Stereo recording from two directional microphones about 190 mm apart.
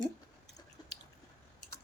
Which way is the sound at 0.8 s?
20° left (ahead or behind).